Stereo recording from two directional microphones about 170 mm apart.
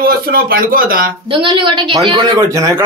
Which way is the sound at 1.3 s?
30° right (ahead or behind).